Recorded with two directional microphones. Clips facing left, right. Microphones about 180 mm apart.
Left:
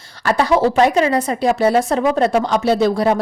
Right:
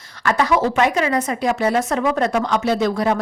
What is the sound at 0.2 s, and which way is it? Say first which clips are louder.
Speech: left 3 dB; 30° left (ahead or behind).